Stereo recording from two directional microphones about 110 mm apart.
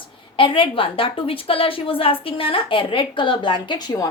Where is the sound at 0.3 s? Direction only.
50° left (ahead or behind).